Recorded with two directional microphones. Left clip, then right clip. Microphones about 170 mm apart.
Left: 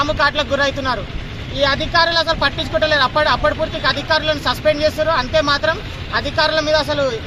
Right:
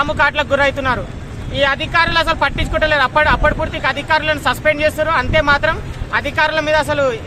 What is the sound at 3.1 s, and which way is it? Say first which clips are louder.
Speech: right 2 dB; 10° right (ahead or behind).